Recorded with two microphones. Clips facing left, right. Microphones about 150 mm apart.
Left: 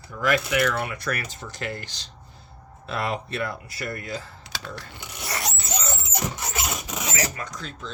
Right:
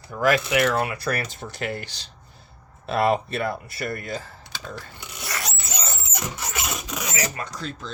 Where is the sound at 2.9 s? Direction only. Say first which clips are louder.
Right 7 dB; 60° right (ahead or behind).